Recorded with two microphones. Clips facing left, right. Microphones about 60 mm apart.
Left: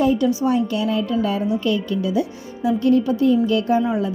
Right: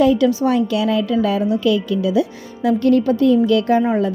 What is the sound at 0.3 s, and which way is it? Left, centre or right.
A woman's voice, right.